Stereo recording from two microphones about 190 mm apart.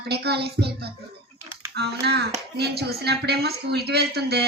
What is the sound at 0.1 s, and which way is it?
Speech, 60° right (ahead or behind).